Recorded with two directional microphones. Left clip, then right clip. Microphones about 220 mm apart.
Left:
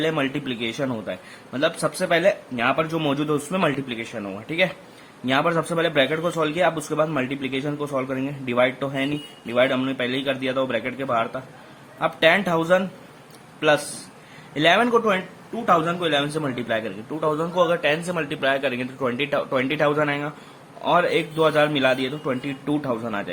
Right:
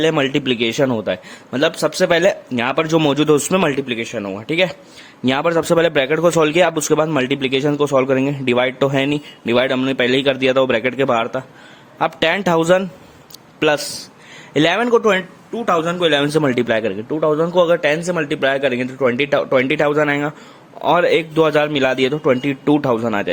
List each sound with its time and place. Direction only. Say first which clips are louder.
0.0 s a man's voice: right 7 dB; 45° right (ahead or behind)
17.1 s a man's voice: right 6 dB; 30° right (ahead or behind)